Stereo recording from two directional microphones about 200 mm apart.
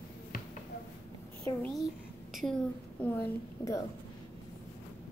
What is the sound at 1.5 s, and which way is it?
A child's voice, 5° left (ahead or behind).